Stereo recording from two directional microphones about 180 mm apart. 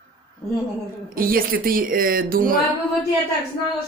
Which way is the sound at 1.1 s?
55° right (ahead or behind).